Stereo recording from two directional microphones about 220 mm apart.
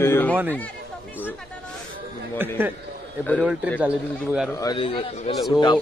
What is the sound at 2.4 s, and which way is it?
Speech, 10° right (ahead or behind).